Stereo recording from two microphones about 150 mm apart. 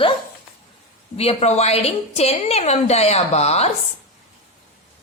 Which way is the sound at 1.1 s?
45° left (ahead or behind).